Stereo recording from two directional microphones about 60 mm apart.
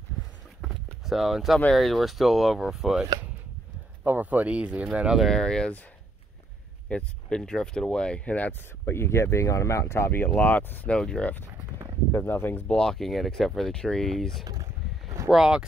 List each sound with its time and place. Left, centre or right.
0.6 s a sound: centre
1.7 s speech: centre
4.0 s speech: right
5.2 s speech: centre
6.9 s speech: centre
8.8 s speech: left
10.4 s speech: left
11.0 s speech: centre
12.3 s speech: left
12.6 s speech: centre
15.2 s speech: centre